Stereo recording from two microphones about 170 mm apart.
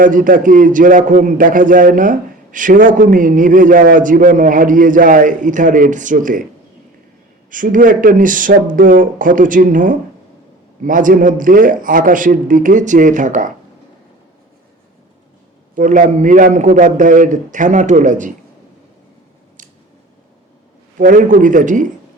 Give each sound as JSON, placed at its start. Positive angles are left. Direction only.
{"t": 0.0, "sound": "a man's voice", "side_deg": -50}
{"t": 7.5, "sound": "a man's voice", "side_deg": -50}
{"t": 15.7, "sound": "a man's voice", "side_deg": -50}
{"t": 21.0, "sound": "a man's voice", "side_deg": -50}